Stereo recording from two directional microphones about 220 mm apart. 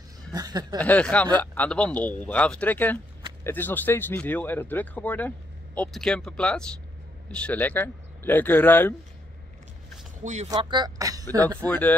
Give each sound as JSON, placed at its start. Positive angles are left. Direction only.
{"t": 0.3, "sound": "speech", "side_deg": -15}
{"t": 0.7, "sound": "speech", "side_deg": 5}
{"t": 10.2, "sound": "speech", "side_deg": -30}
{"t": 10.5, "sound": "speech", "side_deg": -20}
{"t": 11.4, "sound": "speech", "side_deg": 10}